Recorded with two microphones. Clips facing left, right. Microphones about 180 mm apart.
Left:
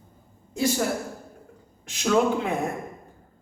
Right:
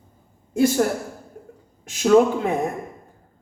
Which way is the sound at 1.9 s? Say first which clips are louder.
Right 6 dB; 45° right (ahead or behind).